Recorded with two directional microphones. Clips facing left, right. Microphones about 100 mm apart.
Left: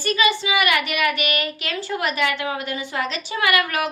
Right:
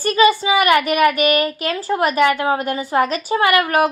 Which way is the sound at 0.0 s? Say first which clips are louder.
Right 6 dB; 40° right (ahead or behind).